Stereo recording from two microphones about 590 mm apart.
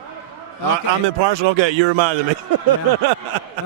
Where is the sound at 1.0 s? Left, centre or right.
Right.